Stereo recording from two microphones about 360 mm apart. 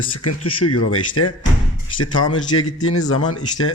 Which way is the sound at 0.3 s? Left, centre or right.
Left.